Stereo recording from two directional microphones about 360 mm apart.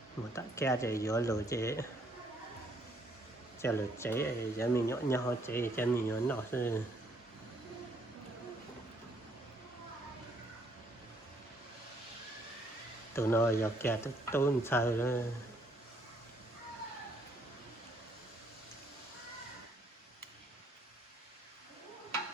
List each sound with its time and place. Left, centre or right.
0.3 s speech: centre
3.6 s speech: centre
13.1 s speech: centre